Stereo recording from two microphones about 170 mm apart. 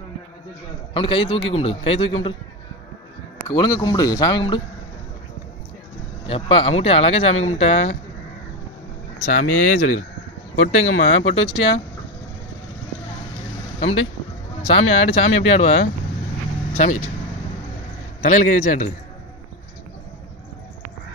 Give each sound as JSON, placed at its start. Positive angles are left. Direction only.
{"t": 0.9, "sound": "speech", "side_deg": 30}
{"t": 3.4, "sound": "speech", "side_deg": 25}
{"t": 6.2, "sound": "speech", "side_deg": 35}
{"t": 9.2, "sound": "speech", "side_deg": 50}
{"t": 14.6, "sound": "speech", "side_deg": 35}
{"t": 16.7, "sound": "speech", "side_deg": 45}
{"t": 18.2, "sound": "speech", "side_deg": 50}